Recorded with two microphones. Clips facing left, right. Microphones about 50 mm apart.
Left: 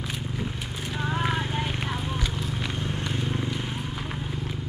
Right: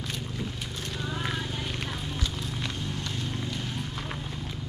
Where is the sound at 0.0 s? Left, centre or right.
Centre.